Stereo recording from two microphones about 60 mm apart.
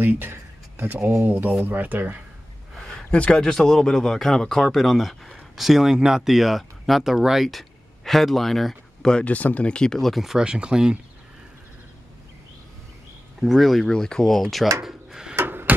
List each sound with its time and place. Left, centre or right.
0.0 s a sound: right
1.6 s speech: right
2.8 s speech: centre
9.1 s speech: left; by 11.0 s centre
13.4 s speech: centre
14.8 s drawer open or close: centre
15.3 s a sound: right